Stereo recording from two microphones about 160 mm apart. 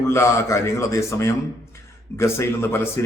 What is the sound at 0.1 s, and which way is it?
Speech, 15° left (ahead or behind).